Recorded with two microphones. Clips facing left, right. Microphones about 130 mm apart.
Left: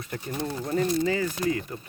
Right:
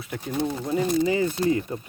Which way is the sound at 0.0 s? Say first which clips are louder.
Right 4 dB; 5° right (ahead or behind).